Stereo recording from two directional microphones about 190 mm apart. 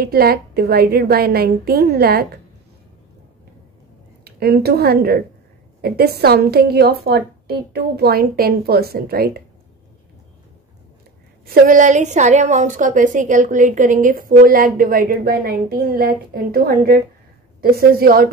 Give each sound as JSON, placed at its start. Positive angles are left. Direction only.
{"t": 0.0, "sound": "a woman's voice", "side_deg": -55}
{"t": 4.2, "sound": "a woman's voice", "side_deg": -55}
{"t": 11.4, "sound": "a woman's voice", "side_deg": -45}